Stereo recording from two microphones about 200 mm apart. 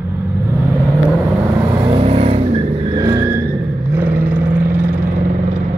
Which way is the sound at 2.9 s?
15° right (ahead or behind).